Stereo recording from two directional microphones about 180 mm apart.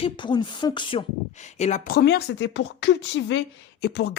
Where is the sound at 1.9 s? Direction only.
60° left (ahead or behind); by 3.4 s 85° left.